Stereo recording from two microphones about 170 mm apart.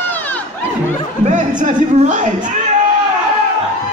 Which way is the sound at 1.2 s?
45° right (ahead or behind).